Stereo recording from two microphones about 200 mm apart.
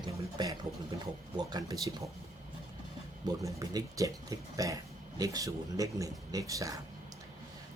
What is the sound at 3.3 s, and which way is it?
Speech, 20° right (ahead or behind).